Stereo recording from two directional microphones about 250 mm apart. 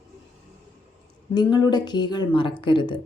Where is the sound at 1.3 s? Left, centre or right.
Centre.